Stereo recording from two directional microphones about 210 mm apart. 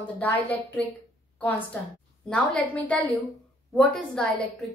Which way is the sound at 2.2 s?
5° left (ahead or behind).